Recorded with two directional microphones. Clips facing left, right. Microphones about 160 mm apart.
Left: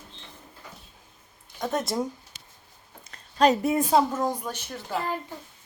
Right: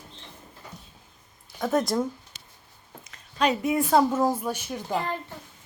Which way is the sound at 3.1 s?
40° left (ahead or behind).